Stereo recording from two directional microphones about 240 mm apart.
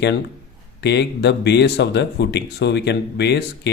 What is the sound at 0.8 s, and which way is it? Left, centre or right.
Speech, left.